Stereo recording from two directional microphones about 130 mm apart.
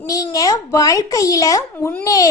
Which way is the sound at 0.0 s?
25° left (ahead or behind).